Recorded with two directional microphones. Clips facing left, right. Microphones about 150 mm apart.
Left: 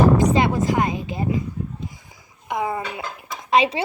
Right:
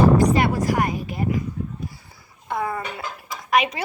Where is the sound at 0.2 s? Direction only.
20° left (ahead or behind).